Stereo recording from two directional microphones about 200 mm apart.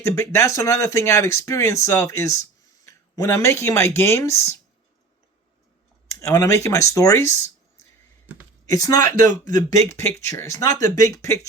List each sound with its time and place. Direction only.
0.0 s speech: 15° left (ahead or behind)
6.1 s speech: 15° left (ahead or behind)
8.6 s speech: 15° left (ahead or behind)